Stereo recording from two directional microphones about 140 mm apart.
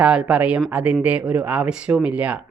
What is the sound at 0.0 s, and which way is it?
Speech, 5° right (ahead or behind).